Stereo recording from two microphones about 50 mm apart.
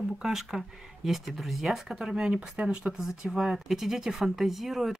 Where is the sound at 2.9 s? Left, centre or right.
Centre.